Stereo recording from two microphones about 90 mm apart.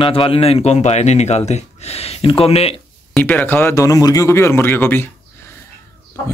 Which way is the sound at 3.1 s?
20° left (ahead or behind).